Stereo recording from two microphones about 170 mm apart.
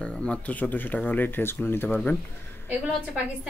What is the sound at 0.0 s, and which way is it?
Speech, 5° left (ahead or behind).